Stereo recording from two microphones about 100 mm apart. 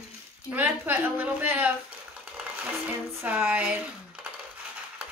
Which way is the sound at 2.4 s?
15° right (ahead or behind).